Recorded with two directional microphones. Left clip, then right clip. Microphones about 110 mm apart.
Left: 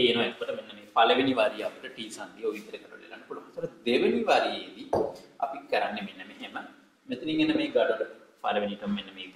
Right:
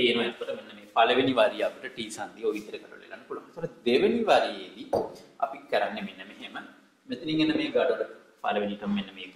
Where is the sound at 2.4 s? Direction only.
55° right (ahead or behind).